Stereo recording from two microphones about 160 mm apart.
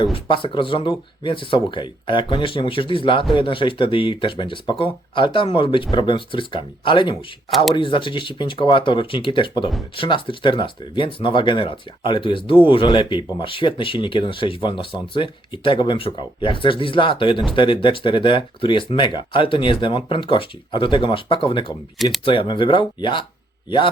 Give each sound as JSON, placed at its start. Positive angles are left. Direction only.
{"t": 0.0, "sound": "a man's voice", "side_deg": 30}